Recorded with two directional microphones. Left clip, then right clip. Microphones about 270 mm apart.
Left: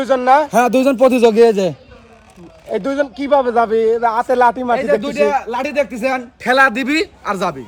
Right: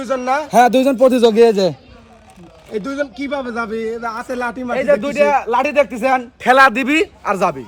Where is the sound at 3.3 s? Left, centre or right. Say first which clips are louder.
Left 9 dB; left.